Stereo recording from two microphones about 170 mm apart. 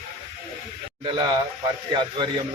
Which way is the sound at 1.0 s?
25° right (ahead or behind).